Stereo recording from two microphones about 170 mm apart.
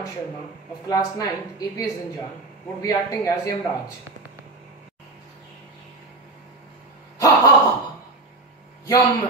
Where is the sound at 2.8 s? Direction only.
20° left (ahead or behind).